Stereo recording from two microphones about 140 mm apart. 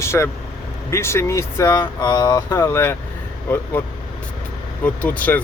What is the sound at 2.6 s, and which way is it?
Speech, 15° left (ahead or behind).